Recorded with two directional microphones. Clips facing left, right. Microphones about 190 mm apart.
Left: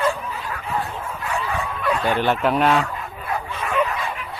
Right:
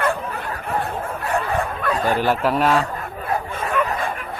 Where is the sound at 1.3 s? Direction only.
55° right (ahead or behind).